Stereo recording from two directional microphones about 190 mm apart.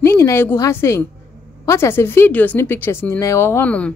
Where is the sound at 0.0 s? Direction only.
15° left (ahead or behind).